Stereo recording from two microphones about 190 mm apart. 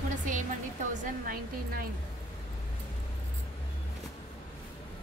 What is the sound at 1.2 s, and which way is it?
Speech, 50° right (ahead or behind).